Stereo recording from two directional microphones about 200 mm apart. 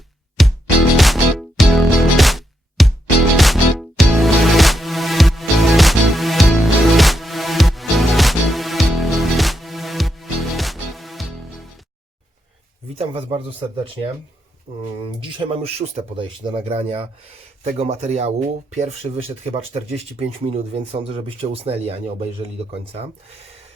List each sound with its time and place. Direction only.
0.4 s music: centre (ahead or behind)
13.0 s speech: 25° right (ahead or behind)
15.4 s speech: 25° right (ahead or behind)